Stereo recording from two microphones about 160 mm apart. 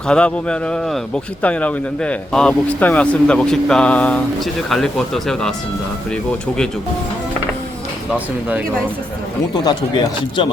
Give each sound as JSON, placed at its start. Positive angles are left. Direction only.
{"t": 0.1, "sound": "speech", "side_deg": 5}
{"t": 8.1, "sound": "speech", "side_deg": -10}
{"t": 9.6, "sound": "speech", "side_deg": 30}